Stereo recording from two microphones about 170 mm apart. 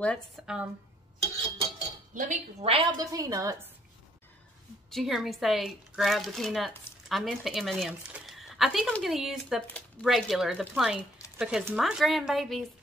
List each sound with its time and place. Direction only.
0.0 s speech: 5° left (ahead or behind)
2.1 s a woman's voice: 45° right (ahead or behind)
2.7 s a woman's voice: 25° right (ahead or behind)
4.9 s a woman's voice: centre (ahead or behind)